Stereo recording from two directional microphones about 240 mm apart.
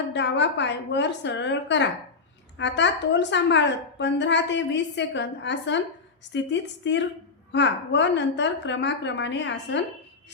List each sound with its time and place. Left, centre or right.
0.1 s a woman's voice: left